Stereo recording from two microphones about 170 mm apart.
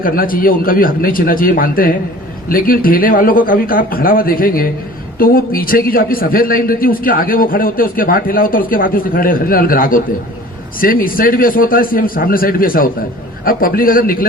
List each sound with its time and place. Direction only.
0.0 s a man's voice: 55° left (ahead or behind)